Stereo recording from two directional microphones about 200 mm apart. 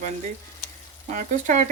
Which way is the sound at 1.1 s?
40° right (ahead or behind).